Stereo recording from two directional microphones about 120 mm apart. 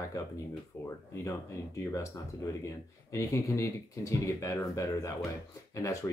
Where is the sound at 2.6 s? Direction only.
25° left (ahead or behind).